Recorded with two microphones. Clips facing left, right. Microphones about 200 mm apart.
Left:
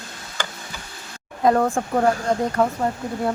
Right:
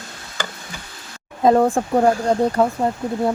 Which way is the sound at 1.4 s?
25° right (ahead or behind).